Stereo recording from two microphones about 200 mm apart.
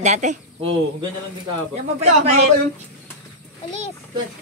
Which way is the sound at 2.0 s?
30° right (ahead or behind).